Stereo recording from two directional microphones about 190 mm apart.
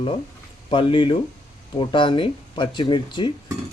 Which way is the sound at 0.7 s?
25° left (ahead or behind).